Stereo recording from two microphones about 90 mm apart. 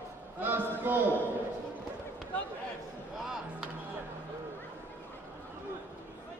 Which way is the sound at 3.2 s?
5° right (ahead or behind).